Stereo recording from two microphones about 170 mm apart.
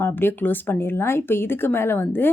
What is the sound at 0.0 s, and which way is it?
Speech, 10° left (ahead or behind).